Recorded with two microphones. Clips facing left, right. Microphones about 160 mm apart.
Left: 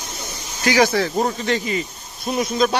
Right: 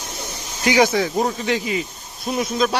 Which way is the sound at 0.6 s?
20° right (ahead or behind).